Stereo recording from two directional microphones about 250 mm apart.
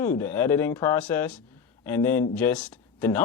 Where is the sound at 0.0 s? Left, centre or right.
Centre.